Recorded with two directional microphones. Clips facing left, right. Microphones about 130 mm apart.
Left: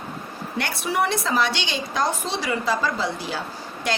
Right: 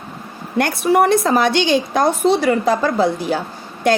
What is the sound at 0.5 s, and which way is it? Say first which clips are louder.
A woman's voice: right 10 dB; 50° right (ahead or behind).